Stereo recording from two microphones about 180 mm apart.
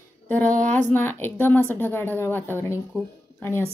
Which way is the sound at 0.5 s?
45° right (ahead or behind).